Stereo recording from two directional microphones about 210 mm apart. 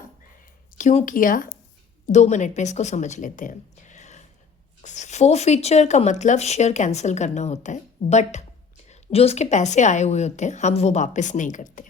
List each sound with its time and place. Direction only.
0.8 s speech: 35° left (ahead or behind)